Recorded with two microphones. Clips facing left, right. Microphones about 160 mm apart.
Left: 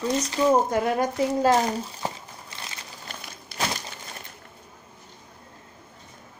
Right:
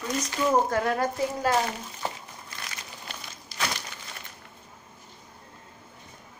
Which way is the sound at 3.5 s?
60° left (ahead or behind).